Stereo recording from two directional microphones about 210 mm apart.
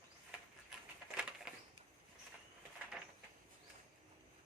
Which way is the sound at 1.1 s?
5° right (ahead or behind).